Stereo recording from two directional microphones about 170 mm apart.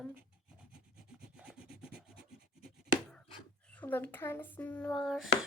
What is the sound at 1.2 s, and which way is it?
Rub, 5° right (ahead or behind).